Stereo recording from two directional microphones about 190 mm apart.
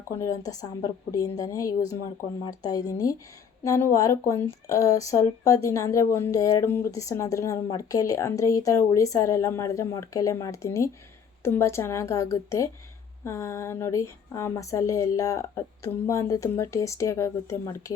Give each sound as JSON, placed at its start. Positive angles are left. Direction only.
{"t": 0.2, "sound": "a woman's voice", "side_deg": 15}